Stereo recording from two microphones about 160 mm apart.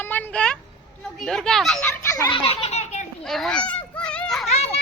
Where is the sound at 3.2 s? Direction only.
Centre (ahead or behind).